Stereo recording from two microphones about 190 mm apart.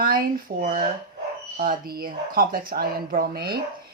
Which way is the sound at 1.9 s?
50° right (ahead or behind).